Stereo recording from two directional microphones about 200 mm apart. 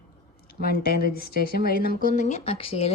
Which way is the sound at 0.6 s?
50° left (ahead or behind).